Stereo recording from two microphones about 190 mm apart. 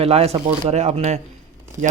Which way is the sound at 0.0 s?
30° right (ahead or behind).